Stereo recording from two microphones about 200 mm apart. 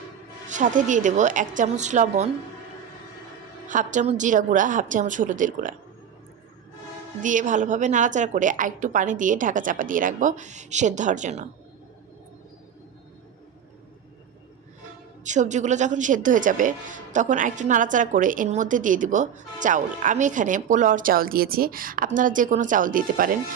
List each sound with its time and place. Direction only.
0.4 s a woman's voice: 40° right (ahead or behind)
3.7 s a woman's voice: 40° right (ahead or behind)
7.2 s a woman's voice: 40° right (ahead or behind)
15.2 s a woman's voice: 35° right (ahead or behind)